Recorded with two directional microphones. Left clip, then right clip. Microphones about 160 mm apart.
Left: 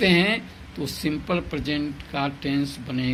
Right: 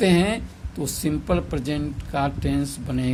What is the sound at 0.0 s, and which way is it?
A woman's voice, 60° right (ahead or behind).